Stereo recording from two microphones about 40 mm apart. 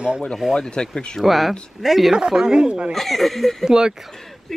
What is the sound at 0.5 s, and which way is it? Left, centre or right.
Speech, left.